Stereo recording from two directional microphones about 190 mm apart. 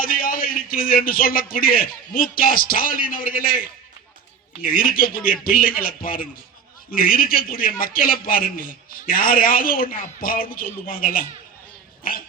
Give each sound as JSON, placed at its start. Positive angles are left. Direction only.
{"t": 0.0, "sound": "a man's voice", "side_deg": 50}
{"t": 4.6, "sound": "a man's voice", "side_deg": 50}